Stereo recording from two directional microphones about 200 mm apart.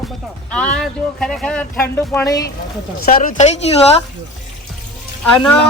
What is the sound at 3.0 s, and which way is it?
Speech, 45° left (ahead or behind).